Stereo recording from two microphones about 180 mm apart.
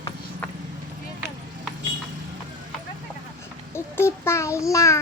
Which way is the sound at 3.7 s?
15° left (ahead or behind).